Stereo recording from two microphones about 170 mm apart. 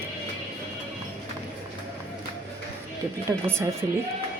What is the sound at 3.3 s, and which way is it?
Speech, 15° right (ahead or behind).